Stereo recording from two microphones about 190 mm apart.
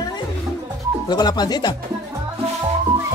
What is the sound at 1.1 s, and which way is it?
Speech, 20° left (ahead or behind).